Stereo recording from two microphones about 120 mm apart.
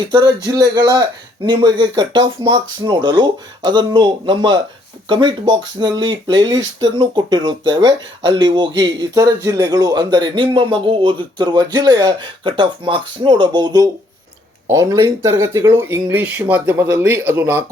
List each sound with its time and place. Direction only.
0.0 s speech: 40° right (ahead or behind)
14.7 s speech: 25° right (ahead or behind)